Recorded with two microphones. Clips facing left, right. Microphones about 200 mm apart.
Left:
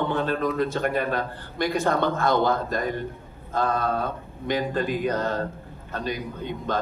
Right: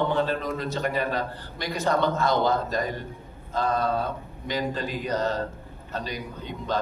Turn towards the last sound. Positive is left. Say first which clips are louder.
# left 2 dB
turn(degrees=50)  # may be behind; listen again after turning